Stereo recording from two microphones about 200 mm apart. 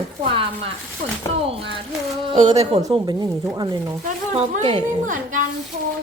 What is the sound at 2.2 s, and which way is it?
A woman's voice, 30° right (ahead or behind).